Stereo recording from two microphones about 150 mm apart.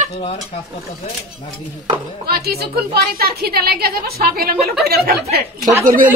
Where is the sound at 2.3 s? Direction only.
90° right.